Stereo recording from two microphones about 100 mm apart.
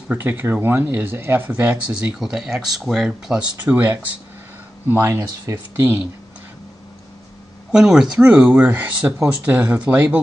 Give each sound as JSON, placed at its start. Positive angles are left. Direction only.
{"t": 0.1, "sound": "speech", "side_deg": -20}
{"t": 3.5, "sound": "speech", "side_deg": -20}
{"t": 7.7, "sound": "speech", "side_deg": -5}